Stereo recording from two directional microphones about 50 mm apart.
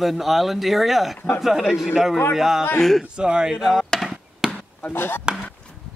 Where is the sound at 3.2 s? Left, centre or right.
Centre.